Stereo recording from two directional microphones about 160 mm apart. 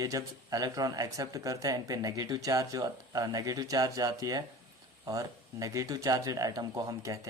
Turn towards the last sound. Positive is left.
turn(degrees=-20)  # may be behind; listen again after turning